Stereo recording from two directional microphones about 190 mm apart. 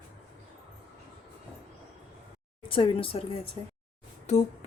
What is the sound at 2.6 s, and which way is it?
Speech, 30° left (ahead or behind).